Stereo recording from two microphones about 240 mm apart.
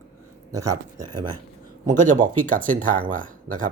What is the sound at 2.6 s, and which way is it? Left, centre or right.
Speech, right.